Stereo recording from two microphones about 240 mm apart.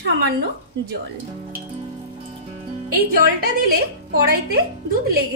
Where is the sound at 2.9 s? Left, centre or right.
Right.